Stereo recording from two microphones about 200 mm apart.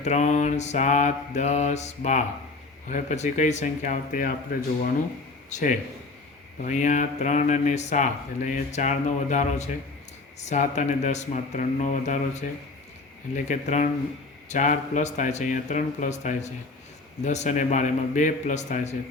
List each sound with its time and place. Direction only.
0.0 s speech: 35° left (ahead or behind)
5.5 s speech: 35° left (ahead or behind)